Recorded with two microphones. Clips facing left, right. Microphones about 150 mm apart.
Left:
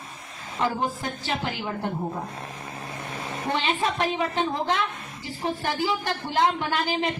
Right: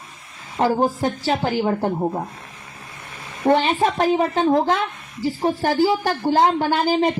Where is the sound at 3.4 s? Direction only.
45° right (ahead or behind).